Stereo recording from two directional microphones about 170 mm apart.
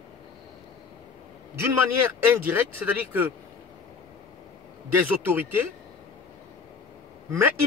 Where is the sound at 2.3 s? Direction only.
15° right (ahead or behind).